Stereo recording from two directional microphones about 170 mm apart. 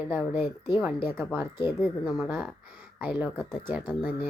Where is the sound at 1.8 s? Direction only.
Centre (ahead or behind).